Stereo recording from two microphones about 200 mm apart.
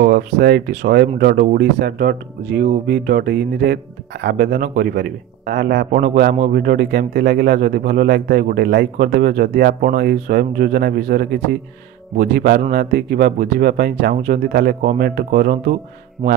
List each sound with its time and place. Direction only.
0.0 s speech: 50° right (ahead or behind)